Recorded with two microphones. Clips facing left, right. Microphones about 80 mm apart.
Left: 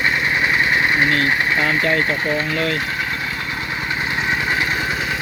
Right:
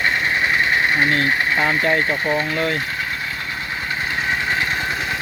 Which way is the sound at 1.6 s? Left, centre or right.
Right.